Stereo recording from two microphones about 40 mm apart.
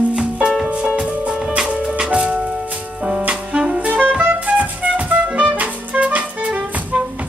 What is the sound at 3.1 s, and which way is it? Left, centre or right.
Music, right.